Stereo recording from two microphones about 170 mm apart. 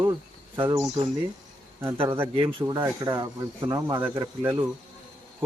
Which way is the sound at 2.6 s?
15° right (ahead or behind).